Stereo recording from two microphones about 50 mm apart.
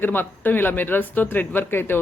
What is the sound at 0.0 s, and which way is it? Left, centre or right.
Speech, left.